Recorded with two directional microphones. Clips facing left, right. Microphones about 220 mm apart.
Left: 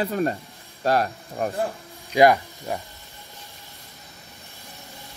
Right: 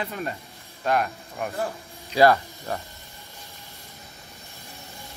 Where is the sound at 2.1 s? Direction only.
15° left (ahead or behind).